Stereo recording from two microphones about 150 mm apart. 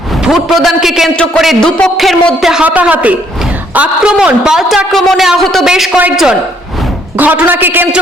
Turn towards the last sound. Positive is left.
turn(degrees=-15)  # may be behind; listen again after turning